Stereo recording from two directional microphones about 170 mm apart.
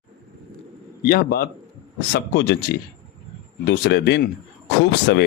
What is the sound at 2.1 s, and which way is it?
Speech, 85° left.